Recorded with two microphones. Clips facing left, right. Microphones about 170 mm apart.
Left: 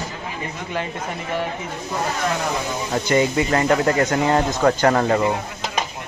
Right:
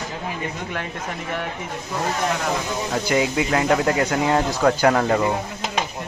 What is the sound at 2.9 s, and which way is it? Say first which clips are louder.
Speech: left 3 dB; 5° right (ahead or behind).